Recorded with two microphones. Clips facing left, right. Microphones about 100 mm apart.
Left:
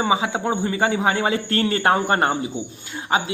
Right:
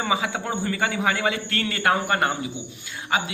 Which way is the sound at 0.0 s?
25° left (ahead or behind).